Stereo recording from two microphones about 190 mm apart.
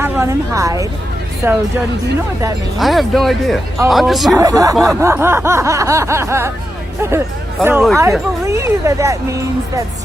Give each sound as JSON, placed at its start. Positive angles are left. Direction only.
{"t": 0.0, "sound": "a woman's voice", "side_deg": -15}
{"t": 1.4, "sound": "snicker", "side_deg": -10}
{"t": 2.7, "sound": "speech", "side_deg": 0}
{"t": 4.4, "sound": "snicker", "side_deg": -20}